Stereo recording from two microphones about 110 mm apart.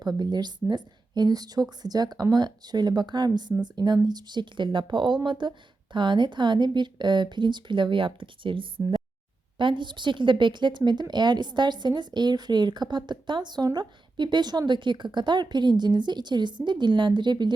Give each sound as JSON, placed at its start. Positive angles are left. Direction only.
{"t": 0.0, "sound": "a woman's voice", "side_deg": -40}